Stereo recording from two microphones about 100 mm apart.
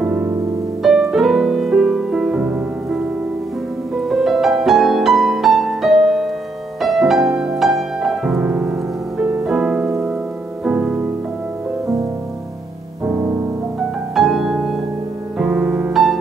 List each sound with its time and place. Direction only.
0.0 s music: 15° right (ahead or behind)
0.8 s music: centre (ahead or behind)
4.1 s music: centre (ahead or behind)
14.1 s music: 5° right (ahead or behind)